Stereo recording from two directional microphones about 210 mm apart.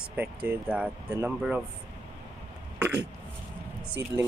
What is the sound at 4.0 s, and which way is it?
Speech, 55° right (ahead or behind).